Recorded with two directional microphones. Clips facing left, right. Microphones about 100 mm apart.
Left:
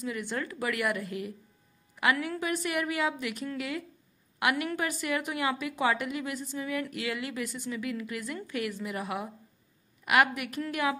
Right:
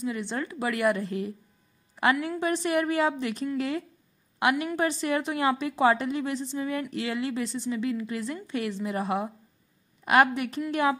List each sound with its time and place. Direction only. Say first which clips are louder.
0.0 s a woman's voice: right 3 dB; 25° right (ahead or behind)